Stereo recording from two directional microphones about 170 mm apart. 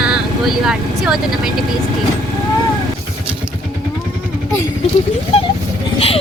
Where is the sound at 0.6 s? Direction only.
5° right (ahead or behind).